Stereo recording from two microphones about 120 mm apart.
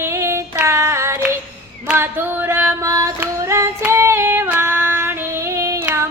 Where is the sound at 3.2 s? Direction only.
20° right (ahead or behind).